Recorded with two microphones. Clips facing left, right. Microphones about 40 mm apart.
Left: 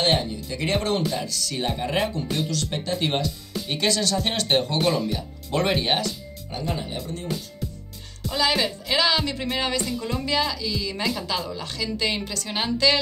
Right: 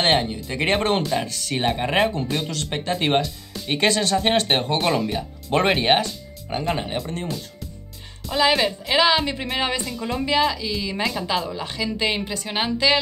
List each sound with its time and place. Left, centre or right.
0.0 s speech: right
4.8 s a woman's voice: right
5.1 s speech: right
8.3 s a woman's voice: centre
9.8 s speech: centre
10.1 s a woman's voice: centre